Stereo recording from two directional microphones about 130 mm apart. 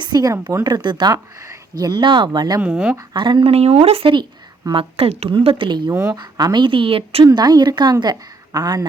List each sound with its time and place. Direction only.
0.0 s a woman's voice: 30° right (ahead or behind)
2.6 s speech: 10° right (ahead or behind)
3.1 s speech: 35° right (ahead or behind)
5.9 s speech: 15° right (ahead or behind)
6.1 s a woman's voice: 35° right (ahead or behind)
7.3 s a woman's voice: 30° right (ahead or behind)